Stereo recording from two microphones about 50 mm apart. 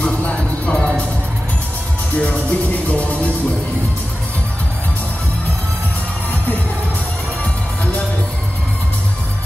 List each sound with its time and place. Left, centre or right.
0.0 s music: left
2.1 s music: left